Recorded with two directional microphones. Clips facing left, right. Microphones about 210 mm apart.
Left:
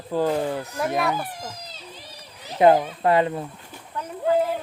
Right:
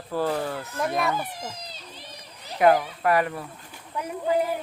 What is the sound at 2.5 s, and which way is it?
Speech, 25° left (ahead or behind).